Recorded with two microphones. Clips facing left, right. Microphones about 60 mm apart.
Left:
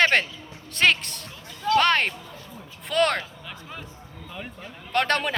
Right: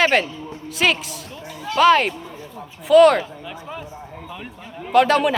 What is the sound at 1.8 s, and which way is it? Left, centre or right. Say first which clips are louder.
Speech: right 7 dB; centre.